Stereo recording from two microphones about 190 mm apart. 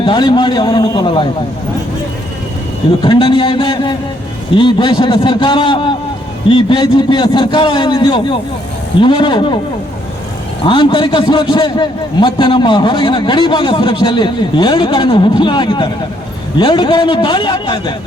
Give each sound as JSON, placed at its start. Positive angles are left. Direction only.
{"t": 0.0, "sound": "a man's voice", "side_deg": 25}
{"t": 3.0, "sound": "a man's voice", "side_deg": 25}
{"t": 10.7, "sound": "a man's voice", "side_deg": 25}